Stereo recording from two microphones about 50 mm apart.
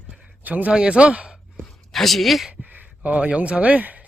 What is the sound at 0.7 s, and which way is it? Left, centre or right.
Speech, centre.